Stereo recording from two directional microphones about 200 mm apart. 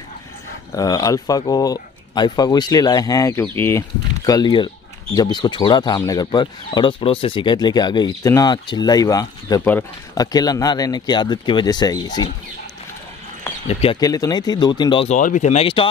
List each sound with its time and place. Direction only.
0.7 s speech: 15° left (ahead or behind)
13.7 s speech: 30° left (ahead or behind)
13.9 s speech: 20° left (ahead or behind)
15.1 s speech: 40° left (ahead or behind)